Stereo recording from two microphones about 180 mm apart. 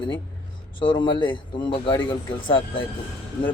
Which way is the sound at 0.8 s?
25° left (ahead or behind).